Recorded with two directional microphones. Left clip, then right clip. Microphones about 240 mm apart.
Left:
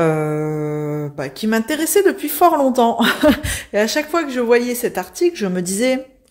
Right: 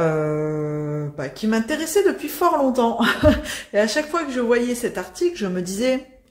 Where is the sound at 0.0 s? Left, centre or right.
Left.